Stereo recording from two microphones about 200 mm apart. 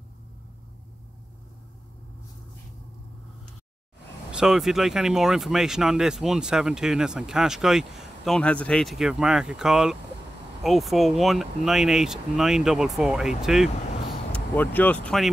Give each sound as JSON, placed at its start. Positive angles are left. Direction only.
{"t": 4.3, "sound": "speech", "side_deg": -5}
{"t": 14.3, "sound": "speech", "side_deg": 10}